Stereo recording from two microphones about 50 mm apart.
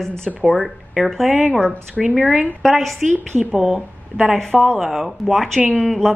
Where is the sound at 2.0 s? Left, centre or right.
Centre.